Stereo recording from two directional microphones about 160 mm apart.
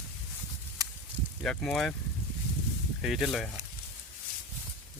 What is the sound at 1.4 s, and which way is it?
Speech, centre (ahead or behind).